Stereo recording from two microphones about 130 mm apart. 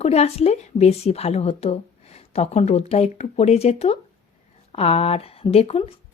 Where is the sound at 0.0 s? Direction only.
55° left (ahead or behind).